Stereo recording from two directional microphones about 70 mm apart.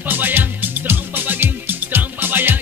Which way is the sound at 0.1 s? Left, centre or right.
Right.